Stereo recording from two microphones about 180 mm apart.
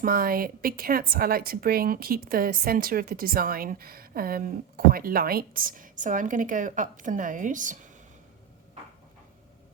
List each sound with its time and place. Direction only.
0.0 s a woman's voice: 55° right (ahead or behind)